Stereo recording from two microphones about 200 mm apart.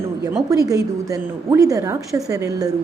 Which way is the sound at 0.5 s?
15° right (ahead or behind).